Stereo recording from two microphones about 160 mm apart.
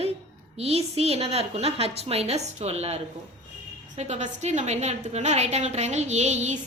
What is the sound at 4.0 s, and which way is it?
A woman's voice, 45° right (ahead or behind).